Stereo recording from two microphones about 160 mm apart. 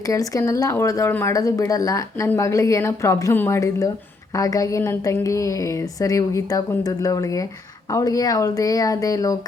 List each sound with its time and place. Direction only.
0.1 s speech: 20° left (ahead or behind)